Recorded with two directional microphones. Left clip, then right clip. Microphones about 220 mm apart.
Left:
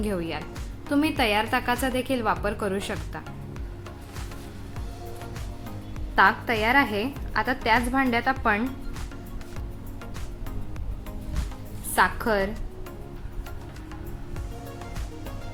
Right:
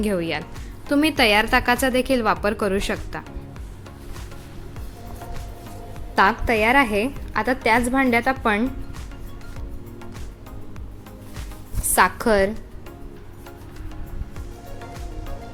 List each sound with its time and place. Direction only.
0.0 s a woman's voice: 30° right (ahead or behind)
6.1 s a woman's voice: 25° right (ahead or behind)
11.9 s a woman's voice: 30° right (ahead or behind)